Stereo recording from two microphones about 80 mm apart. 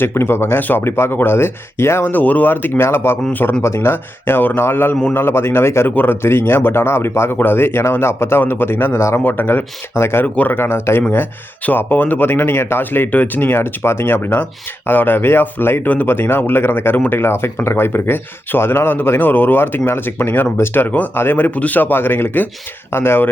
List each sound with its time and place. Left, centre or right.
0.0 s speech: left
9.2 s speech: left
10.2 s speech: centre